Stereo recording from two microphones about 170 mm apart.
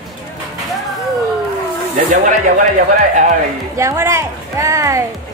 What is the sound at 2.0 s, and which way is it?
Speech, 45° right (ahead or behind).